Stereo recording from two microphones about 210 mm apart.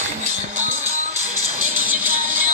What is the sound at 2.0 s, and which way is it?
Music, 40° right (ahead or behind).